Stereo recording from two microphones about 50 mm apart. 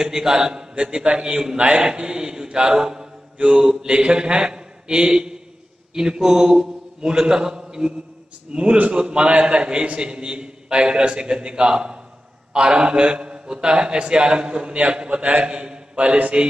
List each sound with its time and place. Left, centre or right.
0.0 s a man's voice: centre